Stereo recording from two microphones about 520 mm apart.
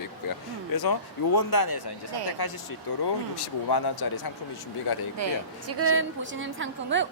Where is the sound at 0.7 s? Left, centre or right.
Left.